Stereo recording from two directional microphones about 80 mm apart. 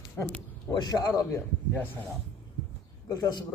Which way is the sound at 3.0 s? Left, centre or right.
Left.